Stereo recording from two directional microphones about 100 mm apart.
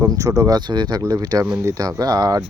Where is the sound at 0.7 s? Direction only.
45° right (ahead or behind).